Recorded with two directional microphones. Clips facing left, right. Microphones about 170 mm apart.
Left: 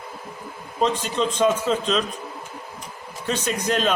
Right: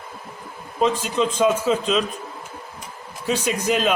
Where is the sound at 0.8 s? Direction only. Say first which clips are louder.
Right 2 dB; 5° right (ahead or behind).